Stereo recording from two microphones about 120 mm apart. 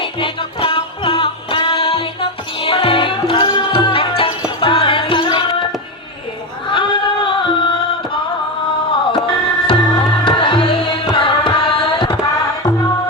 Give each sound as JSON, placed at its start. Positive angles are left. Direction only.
{"t": 0.0, "sound": "music", "side_deg": 45}
{"t": 6.7, "sound": "music", "side_deg": 45}